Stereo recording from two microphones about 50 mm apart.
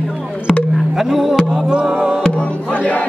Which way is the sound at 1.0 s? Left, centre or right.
Centre.